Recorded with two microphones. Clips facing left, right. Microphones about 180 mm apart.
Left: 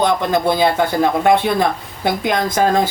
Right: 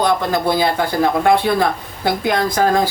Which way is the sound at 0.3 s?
20° left (ahead or behind).